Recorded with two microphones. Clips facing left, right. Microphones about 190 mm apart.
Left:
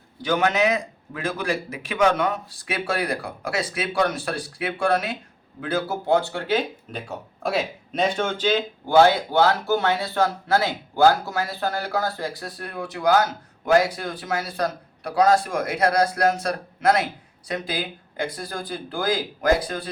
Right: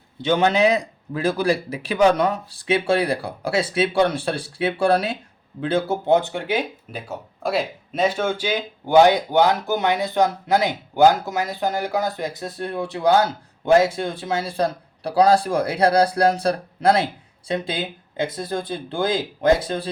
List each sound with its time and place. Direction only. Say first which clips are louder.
0.2 s a man's voice: right 3 dB; 25° right (ahead or behind)
7.4 s speech: right 2 dB; centre (ahead or behind); by 19.9 s 25° right (ahead or behind)